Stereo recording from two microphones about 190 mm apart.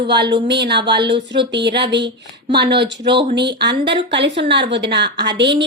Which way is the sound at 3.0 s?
25° right (ahead or behind).